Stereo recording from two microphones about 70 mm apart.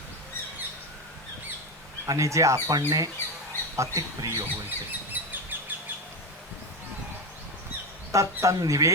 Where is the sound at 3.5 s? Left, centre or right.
Left.